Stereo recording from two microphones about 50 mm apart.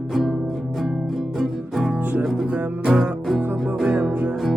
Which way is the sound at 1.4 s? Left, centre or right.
Centre.